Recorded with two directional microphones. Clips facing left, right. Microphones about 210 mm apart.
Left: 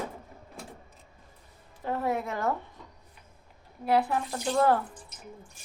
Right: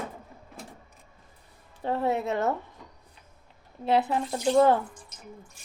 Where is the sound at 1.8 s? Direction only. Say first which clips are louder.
Right 3 dB; 25° right (ahead or behind).